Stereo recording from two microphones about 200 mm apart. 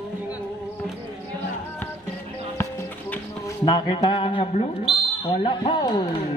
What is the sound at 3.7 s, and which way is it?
Speech, 20° left (ahead or behind).